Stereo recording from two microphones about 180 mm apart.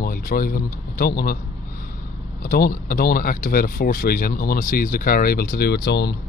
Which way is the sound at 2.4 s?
55° left (ahead or behind).